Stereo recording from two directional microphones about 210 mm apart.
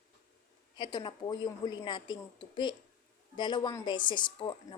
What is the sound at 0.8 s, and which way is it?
A woman's voice, 20° left (ahead or behind).